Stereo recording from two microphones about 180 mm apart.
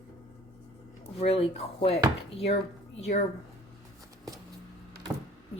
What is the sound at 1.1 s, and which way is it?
Speech, 35° left (ahead or behind).